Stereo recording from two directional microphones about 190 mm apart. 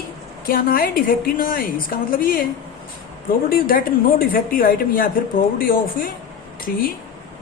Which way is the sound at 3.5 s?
50° left (ahead or behind).